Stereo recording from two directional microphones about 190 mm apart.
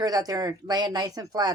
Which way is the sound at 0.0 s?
20° right (ahead or behind).